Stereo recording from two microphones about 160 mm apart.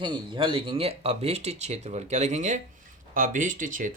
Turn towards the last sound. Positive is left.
turn(degrees=-55)  # may be behind; listen again after turning